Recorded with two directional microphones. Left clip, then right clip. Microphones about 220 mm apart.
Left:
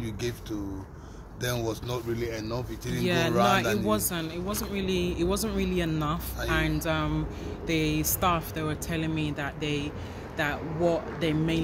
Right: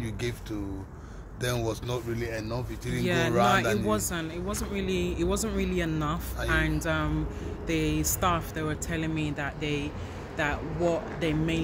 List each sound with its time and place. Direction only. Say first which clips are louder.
0.0 s speech: left 1 dB; 15° right (ahead or behind)
3.0 s speech: left 1 dB; 10° left (ahead or behind)
3.3 s speech: even; 15° right (ahead or behind)
3.8 s speech: left 1 dB; 10° left (ahead or behind)